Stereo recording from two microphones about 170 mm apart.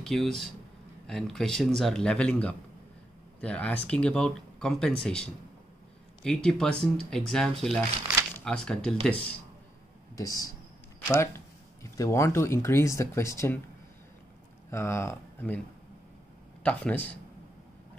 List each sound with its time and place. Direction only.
0.0 s speech: centre (ahead or behind)
10.1 s speech: 20° left (ahead or behind)
14.7 s speech: 15° left (ahead or behind)
16.6 s speech: 10° left (ahead or behind)